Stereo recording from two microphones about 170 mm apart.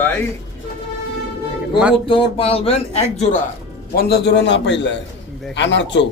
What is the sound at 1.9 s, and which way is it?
Speech, 30° left (ahead or behind).